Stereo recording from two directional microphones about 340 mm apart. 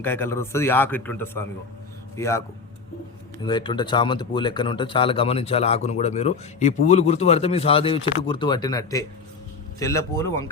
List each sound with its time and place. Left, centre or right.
0.0 s speech: centre
3.4 s speech: centre